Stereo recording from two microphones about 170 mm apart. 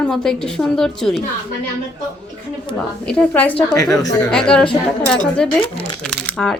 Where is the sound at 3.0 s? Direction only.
5° left (ahead or behind).